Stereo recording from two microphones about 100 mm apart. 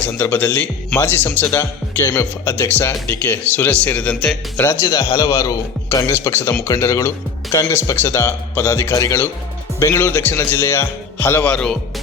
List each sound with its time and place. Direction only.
0.0 s speech: 20° left (ahead or behind)
4.6 s speech: 30° left (ahead or behind); by 11.8 s 10° left (ahead or behind)